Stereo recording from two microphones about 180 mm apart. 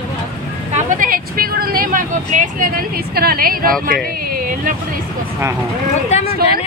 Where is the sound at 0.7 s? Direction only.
45° right (ahead or behind).